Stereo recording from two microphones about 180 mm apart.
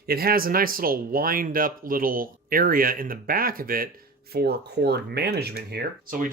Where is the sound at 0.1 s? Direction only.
60° right (ahead or behind).